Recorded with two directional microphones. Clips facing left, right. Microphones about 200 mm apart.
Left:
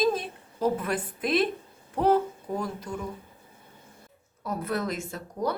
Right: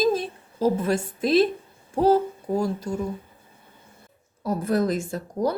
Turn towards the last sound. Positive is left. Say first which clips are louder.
# right 5 dB
turn(degrees=-30)  # may be behind; listen again after turning